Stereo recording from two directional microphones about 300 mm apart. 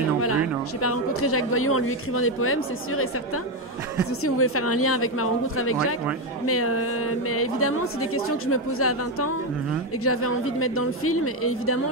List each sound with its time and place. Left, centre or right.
0.8 s a woman's voice: left
4.2 s a woman's voice: left